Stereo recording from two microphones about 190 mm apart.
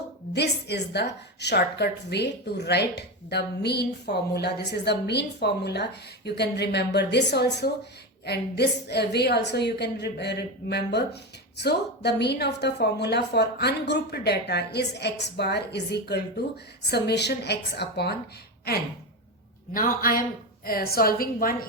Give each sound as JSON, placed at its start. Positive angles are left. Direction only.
{"t": 0.3, "sound": "a woman's voice", "side_deg": 60}
{"t": 19.7, "sound": "a woman's voice", "side_deg": 45}